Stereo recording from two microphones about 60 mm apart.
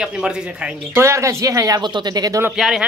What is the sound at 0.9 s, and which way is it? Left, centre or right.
Speech, right.